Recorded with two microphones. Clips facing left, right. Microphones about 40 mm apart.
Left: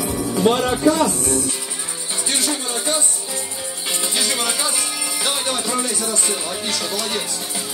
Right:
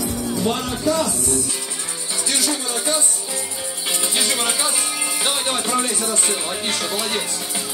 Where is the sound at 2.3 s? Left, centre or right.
Left.